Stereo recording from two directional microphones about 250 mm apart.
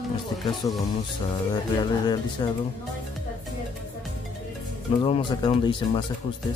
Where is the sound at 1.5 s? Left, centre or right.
Centre.